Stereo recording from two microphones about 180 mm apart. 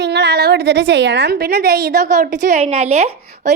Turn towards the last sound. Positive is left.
turn(degrees=-35)  # may be behind; listen again after turning